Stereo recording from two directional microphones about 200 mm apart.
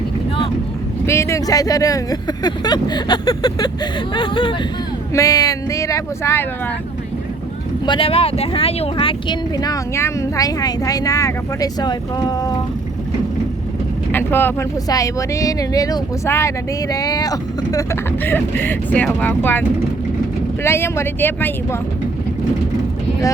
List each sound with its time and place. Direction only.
1.0 s speech: 15° left (ahead or behind)
7.9 s speech: 25° left (ahead or behind)
14.1 s speech: 10° left (ahead or behind)
20.7 s speech: 10° left (ahead or behind)